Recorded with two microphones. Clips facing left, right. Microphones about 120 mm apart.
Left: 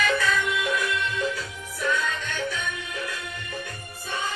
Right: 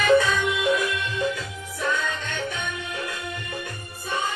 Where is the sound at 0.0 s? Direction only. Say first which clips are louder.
Right 5 dB; 25° right (ahead or behind).